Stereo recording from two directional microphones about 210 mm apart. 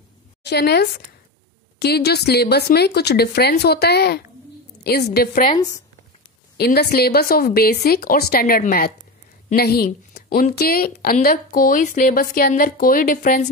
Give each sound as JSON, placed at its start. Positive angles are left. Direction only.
{"t": 0.4, "sound": "a woman's voice", "side_deg": 50}
{"t": 5.5, "sound": "speech", "side_deg": 15}
{"t": 6.5, "sound": "a woman's voice", "side_deg": 50}